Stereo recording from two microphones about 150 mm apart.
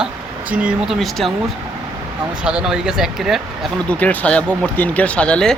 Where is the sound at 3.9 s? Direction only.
10° left (ahead or behind).